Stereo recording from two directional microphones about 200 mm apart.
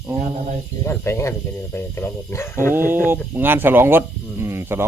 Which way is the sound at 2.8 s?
10° right (ahead or behind).